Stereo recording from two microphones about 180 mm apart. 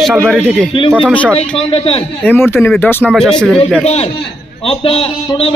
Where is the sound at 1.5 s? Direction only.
30° left (ahead or behind).